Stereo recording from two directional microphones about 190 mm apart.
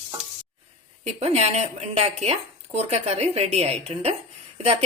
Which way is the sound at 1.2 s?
35° right (ahead or behind).